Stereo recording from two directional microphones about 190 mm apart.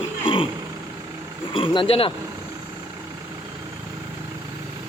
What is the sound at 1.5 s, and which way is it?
Speech, 25° left (ahead or behind).